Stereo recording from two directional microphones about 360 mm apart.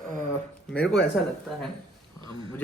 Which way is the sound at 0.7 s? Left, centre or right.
Centre.